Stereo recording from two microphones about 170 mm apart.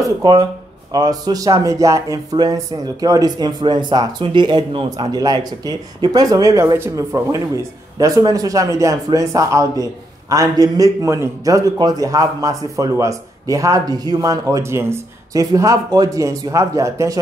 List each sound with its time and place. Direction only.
0.2 s speech: 25° right (ahead or behind)